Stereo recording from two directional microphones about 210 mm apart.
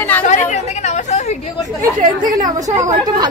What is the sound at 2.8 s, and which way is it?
Speech, 15° right (ahead or behind).